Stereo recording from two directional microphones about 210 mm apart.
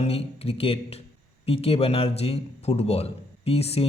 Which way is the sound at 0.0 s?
30° left (ahead or behind).